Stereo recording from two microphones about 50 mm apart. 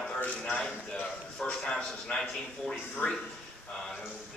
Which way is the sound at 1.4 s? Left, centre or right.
Centre.